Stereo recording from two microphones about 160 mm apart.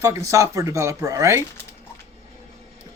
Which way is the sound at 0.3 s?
20° right (ahead or behind).